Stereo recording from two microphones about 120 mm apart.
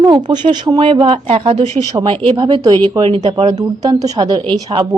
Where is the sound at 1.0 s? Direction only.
60° right (ahead or behind).